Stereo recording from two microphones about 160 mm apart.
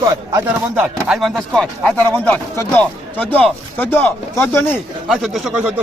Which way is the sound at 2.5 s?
15° left (ahead or behind).